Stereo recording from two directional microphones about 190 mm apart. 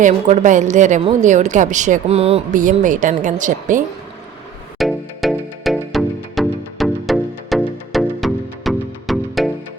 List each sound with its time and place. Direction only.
0.0 s a woman's voice: 40° right (ahead or behind)
2.6 s speech: 45° right (ahead or behind)
4.8 s music: centre (ahead or behind)